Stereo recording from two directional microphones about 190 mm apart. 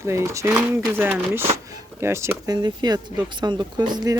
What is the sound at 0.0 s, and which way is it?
Speech, 15° right (ahead or behind).